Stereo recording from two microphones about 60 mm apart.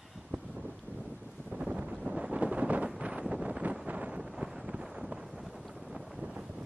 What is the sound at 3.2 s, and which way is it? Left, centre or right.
Wind, centre.